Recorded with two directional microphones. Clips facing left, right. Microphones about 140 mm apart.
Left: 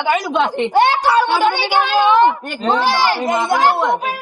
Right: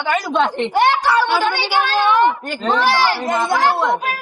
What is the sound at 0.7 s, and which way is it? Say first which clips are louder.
A woman's voice: left 2 dB; 25° left (ahead or behind).